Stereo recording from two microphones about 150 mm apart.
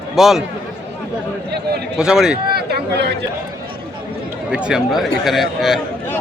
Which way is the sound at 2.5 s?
90° right.